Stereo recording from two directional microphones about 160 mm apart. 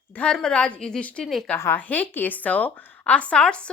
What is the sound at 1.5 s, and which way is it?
Speech, 15° left (ahead or behind).